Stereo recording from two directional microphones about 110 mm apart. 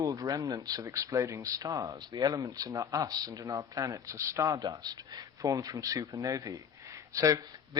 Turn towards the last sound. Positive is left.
turn(degrees=-30)  # may be behind; listen again after turning